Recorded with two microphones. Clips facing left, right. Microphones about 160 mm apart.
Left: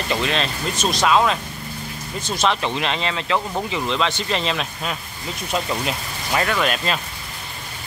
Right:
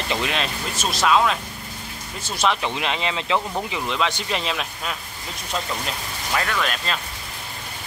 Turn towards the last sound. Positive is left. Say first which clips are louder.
# left 4 dB
turn(degrees=10)  # may be behind; listen again after turning